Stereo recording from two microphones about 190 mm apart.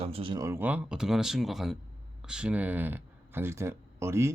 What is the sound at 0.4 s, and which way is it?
Speech, 10° right (ahead or behind).